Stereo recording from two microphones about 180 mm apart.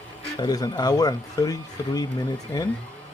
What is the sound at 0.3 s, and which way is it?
Speech, 20° left (ahead or behind).